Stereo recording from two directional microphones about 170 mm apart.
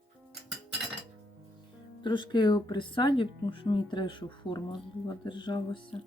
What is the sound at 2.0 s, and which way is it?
Speech, 25° left (ahead or behind).